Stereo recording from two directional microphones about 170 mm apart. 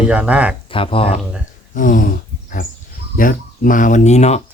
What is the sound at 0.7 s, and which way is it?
Speech, 30° left (ahead or behind).